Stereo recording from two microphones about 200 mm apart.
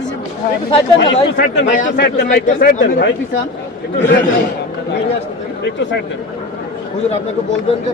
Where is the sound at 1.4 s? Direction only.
40° left (ahead or behind).